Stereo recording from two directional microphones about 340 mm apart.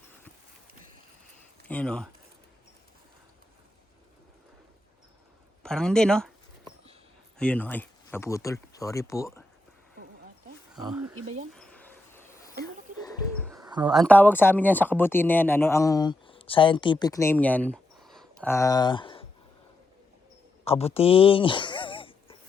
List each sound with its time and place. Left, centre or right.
1.6 s speech: centre
5.6 s speech: centre
7.3 s speech: centre
10.8 s speech: centre
11.5 s dog: centre
13.0 s bird: centre
13.5 s bird: centre
13.9 s speech: centre
20.7 s a sound: centre